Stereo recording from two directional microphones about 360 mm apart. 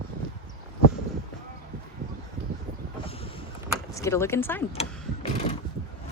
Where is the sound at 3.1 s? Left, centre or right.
Centre.